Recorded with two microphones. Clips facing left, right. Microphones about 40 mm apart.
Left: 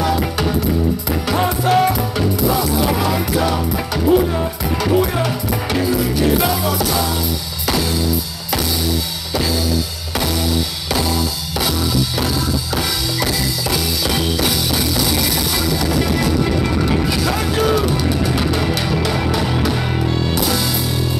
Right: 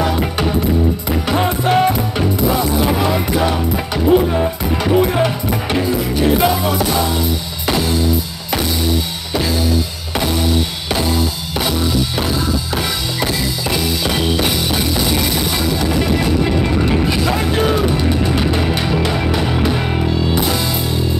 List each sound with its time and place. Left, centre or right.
1.3 s music: right
12.7 s music: right
20.4 s music: right